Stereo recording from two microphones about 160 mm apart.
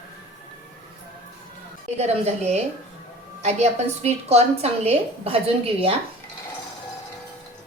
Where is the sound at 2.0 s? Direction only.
45° right (ahead or behind).